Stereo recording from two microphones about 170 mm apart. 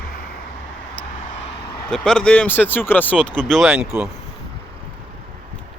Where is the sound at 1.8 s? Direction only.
5° left (ahead or behind).